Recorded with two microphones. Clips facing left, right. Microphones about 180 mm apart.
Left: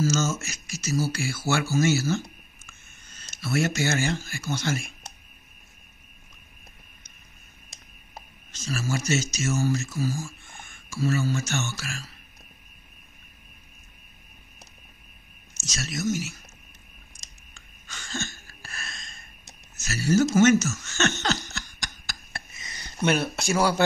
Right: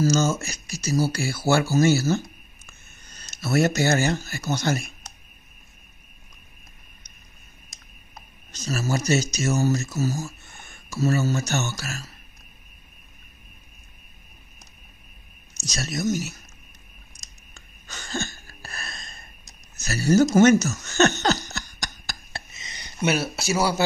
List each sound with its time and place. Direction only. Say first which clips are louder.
0.0 s speech: right 4 dB; 35° right (ahead or behind)
8.5 s speech: right 3 dB; 40° right (ahead or behind)
15.5 s speech: right 3 dB; 35° right (ahead or behind)
17.6 s a sound: right 3 dB; 40° right (ahead or behind)
22.5 s a sound: right 1 dB; 20° right (ahead or behind)
23.0 s speech: even; 5° right (ahead or behind)